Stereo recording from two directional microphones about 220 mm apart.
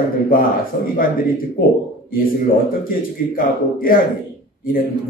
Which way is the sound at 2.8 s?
40° left (ahead or behind).